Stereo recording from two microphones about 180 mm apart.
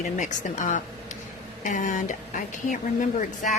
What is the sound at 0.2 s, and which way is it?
A woman's voice, 45° left (ahead or behind).